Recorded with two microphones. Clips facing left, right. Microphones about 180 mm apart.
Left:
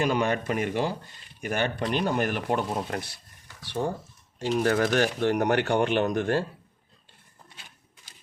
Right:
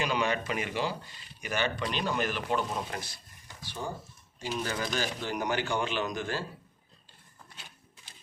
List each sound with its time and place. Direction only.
0.0 s speech: 50° left (ahead or behind)